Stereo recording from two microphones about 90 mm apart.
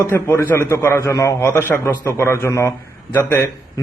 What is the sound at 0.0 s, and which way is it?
A man's voice, 30° left (ahead or behind).